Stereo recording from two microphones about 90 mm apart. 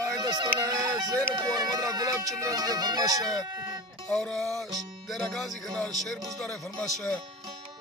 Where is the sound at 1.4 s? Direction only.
45° right (ahead or behind).